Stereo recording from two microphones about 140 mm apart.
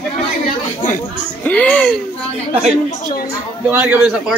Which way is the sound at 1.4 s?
10° left (ahead or behind).